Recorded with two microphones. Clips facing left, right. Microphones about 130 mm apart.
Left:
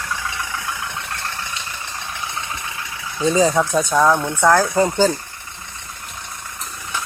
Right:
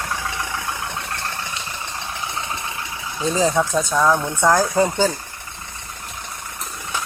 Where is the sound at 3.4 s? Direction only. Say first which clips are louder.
Left 1 dB; 5° left (ahead or behind).